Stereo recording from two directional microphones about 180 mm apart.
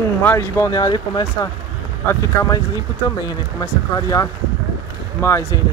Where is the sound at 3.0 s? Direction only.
20° left (ahead or behind).